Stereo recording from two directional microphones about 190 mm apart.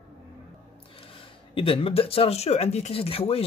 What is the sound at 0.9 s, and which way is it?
Speech, 30° left (ahead or behind).